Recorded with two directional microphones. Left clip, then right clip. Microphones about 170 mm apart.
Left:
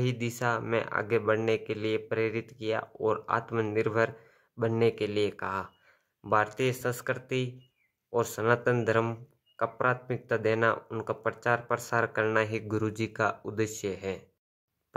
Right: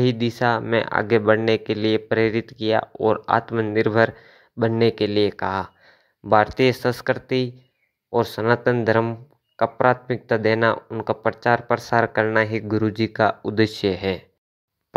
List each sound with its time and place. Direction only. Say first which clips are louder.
0.0 s speech: right 10 dB; 25° right (ahead or behind)